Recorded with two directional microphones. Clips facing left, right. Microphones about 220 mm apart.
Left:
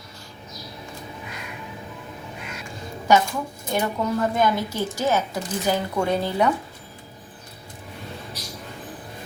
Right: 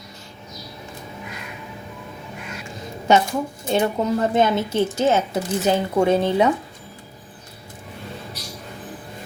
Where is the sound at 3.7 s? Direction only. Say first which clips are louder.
Right 4 dB; 25° right (ahead or behind).